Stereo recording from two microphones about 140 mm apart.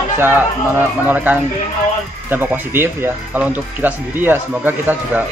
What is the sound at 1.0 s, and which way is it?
Speech, 15° right (ahead or behind).